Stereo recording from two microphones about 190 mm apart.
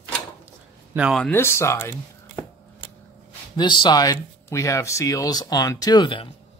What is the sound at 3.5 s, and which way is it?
Speech, 25° left (ahead or behind).